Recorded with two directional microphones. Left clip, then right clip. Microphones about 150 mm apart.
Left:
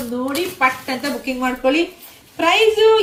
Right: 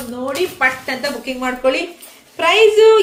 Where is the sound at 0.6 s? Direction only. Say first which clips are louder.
Left 1 dB; 30° right (ahead or behind).